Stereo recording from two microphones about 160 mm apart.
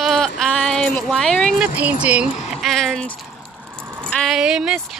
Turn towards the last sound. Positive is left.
turn(degrees=-5)  # may be behind; listen again after turning